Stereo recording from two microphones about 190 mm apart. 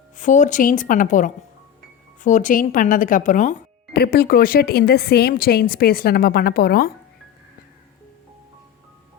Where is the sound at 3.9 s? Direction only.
55° left (ahead or behind).